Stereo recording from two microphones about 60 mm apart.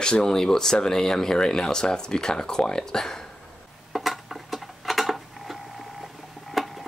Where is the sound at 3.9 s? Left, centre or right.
Centre.